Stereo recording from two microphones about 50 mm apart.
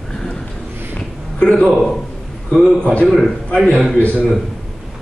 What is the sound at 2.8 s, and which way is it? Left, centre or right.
Speech, left.